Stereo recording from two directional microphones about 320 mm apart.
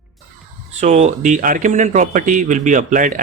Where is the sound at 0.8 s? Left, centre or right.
Right.